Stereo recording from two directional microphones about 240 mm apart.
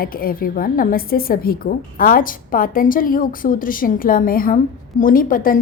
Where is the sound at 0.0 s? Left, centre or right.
Left.